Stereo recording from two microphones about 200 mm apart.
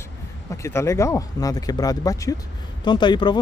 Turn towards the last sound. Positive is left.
turn(degrees=20)  # may be behind; listen again after turning